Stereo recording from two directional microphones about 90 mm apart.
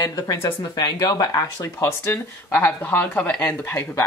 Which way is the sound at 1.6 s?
25° left (ahead or behind).